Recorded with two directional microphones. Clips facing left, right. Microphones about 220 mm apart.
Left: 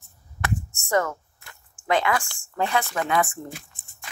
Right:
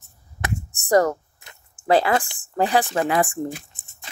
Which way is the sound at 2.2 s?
20° right (ahead or behind).